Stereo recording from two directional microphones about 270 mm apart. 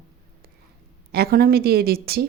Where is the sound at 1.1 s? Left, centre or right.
Right.